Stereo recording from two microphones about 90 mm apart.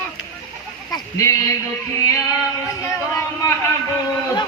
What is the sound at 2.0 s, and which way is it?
Speech, 40° left (ahead or behind).